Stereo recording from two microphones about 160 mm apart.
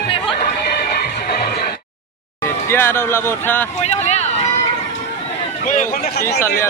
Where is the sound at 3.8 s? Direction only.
45° left (ahead or behind).